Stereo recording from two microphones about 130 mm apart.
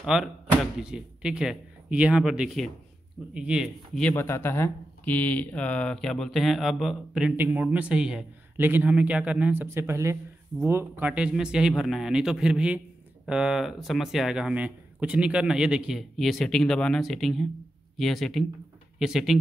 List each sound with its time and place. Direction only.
0.0 s speech: 5° right (ahead or behind)
4.1 s speech: 20° left (ahead or behind); by 8.3 s 5° right (ahead or behind)
8.5 s speech: 15° right (ahead or behind)